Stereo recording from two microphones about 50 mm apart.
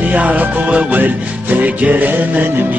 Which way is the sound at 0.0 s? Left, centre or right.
Right.